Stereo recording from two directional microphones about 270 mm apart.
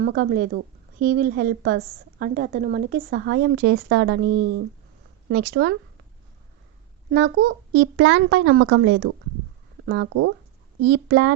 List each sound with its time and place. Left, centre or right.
0.0 s a woman's voice: right
7.1 s a woman's voice: right